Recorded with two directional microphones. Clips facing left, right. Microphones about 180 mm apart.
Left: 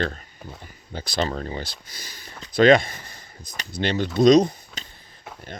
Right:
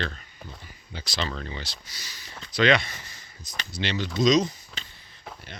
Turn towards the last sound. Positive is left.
turn(degrees=60)  # may be behind; listen again after turning